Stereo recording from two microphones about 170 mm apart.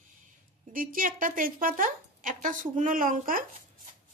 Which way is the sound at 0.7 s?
55° right (ahead or behind).